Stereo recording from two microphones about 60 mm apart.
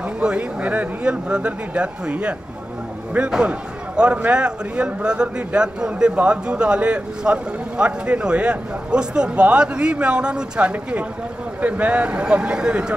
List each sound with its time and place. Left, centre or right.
0.2 s speech: centre